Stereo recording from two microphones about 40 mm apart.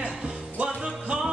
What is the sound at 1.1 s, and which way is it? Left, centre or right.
Music, right.